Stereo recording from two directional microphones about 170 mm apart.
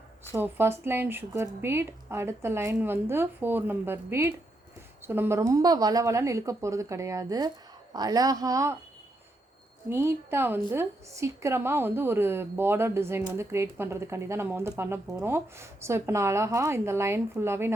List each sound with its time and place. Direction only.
0.3 s a woman's voice: 10° right (ahead or behind)
9.9 s speech: 15° right (ahead or behind)